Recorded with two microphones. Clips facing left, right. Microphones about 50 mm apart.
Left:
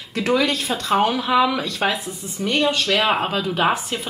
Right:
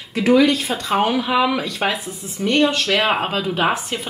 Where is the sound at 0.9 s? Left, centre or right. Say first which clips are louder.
Even; right.